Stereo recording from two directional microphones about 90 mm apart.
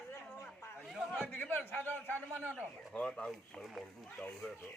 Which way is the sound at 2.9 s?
5° left (ahead or behind).